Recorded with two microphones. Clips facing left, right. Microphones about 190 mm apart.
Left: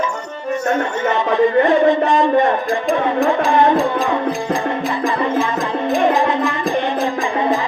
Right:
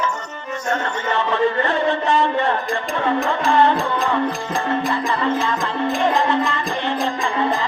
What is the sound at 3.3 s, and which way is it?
Music, 15° left (ahead or behind).